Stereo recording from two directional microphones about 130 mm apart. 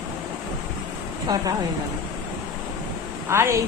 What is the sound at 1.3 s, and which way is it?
Speech, 30° right (ahead or behind).